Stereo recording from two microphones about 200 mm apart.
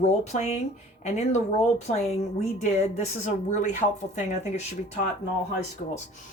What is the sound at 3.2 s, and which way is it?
Speech, 35° left (ahead or behind).